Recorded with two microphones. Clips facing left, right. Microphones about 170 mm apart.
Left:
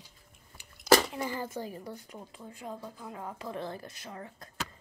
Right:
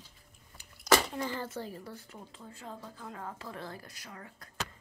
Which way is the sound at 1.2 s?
10° left (ahead or behind).